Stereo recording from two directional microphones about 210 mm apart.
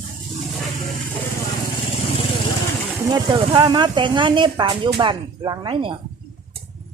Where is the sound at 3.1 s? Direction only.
20° right (ahead or behind).